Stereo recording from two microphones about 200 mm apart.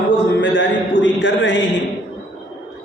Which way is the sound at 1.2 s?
65° left (ahead or behind).